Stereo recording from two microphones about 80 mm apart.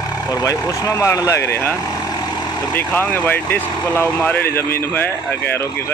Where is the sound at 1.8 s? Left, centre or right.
Left.